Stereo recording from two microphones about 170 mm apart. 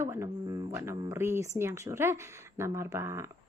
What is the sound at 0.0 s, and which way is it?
Speech, 15° right (ahead or behind).